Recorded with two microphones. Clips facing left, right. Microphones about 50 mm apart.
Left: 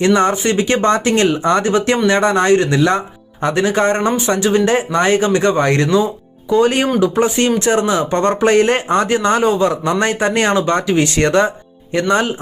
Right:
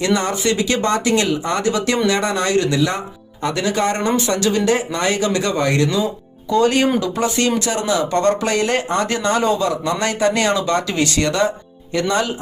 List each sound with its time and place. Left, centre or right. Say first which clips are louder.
0.0 s speech: left 5 dB; left
3.4 s speech: left 4 dB; left
6.5 s speech: left 2 dB; left